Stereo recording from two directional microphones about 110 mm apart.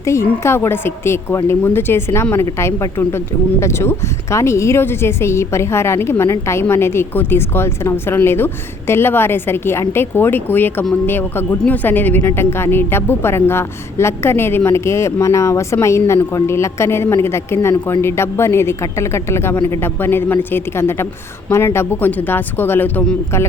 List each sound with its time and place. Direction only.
0.0 s a woman's voice: 25° left (ahead or behind)